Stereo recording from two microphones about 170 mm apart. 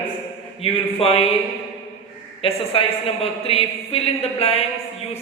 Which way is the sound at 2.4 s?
35° left (ahead or behind).